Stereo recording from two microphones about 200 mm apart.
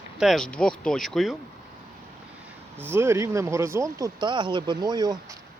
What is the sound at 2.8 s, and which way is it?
Speech, 10° right (ahead or behind).